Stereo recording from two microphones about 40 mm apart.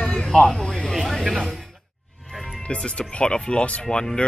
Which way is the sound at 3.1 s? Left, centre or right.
Left.